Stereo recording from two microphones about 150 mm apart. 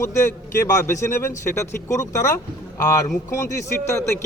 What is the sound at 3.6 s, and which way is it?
Speech, 20° left (ahead or behind).